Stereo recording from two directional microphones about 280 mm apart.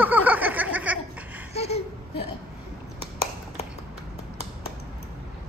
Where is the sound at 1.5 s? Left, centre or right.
Left.